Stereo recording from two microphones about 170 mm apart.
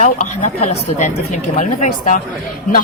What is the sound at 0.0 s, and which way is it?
Speech, 45° left (ahead or behind).